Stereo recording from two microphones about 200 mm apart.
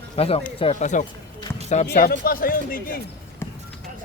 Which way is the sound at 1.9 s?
50° left (ahead or behind).